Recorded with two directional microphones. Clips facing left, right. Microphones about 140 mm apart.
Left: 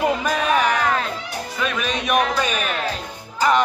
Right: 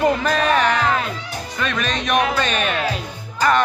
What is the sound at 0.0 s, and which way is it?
Music, 10° left (ahead or behind).